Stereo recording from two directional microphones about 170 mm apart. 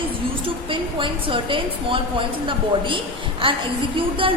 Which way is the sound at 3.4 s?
30° right (ahead or behind).